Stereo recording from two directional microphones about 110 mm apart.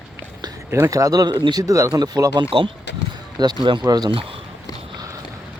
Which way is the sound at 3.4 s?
40° right (ahead or behind).